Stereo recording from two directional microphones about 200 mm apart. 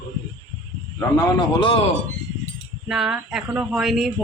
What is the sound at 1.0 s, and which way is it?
Speech, 20° left (ahead or behind).